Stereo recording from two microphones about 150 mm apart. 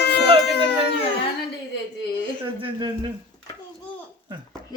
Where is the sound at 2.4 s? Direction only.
35° right (ahead or behind).